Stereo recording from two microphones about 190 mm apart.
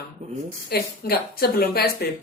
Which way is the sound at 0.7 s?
55° left (ahead or behind).